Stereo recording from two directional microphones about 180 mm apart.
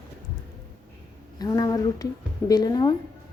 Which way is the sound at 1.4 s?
20° left (ahead or behind).